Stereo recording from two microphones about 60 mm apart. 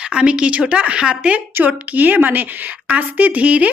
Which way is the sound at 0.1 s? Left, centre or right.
Centre.